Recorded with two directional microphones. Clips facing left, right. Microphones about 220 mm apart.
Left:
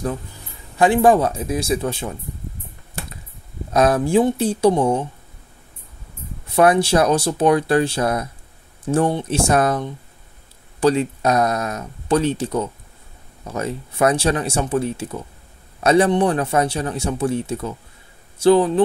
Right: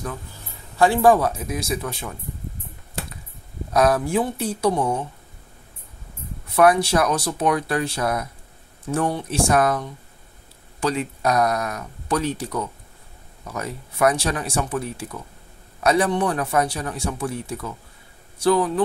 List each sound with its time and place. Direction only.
0.7 s a man's voice: 15° left (ahead or behind)
3.7 s a man's voice: 25° left (ahead or behind)
6.5 s a man's voice: 25° left (ahead or behind)